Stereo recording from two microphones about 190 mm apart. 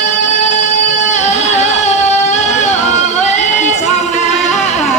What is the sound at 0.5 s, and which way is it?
Music, 40° left (ahead or behind).